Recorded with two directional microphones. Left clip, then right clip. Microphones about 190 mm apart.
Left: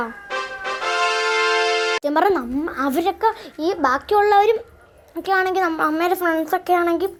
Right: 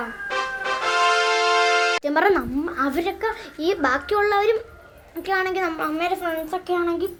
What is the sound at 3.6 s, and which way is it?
A woman's voice, 10° left (ahead or behind).